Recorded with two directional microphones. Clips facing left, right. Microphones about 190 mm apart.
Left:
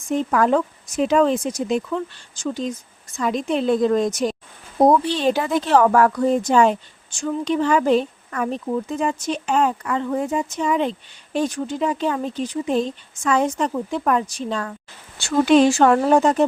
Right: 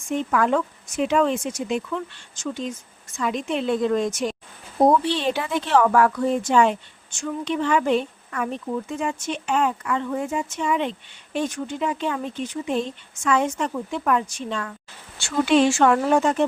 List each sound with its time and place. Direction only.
0.1 s speech: 35° left (ahead or behind)